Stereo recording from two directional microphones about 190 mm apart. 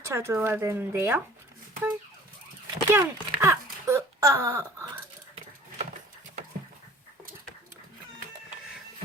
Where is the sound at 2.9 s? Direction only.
15° right (ahead or behind).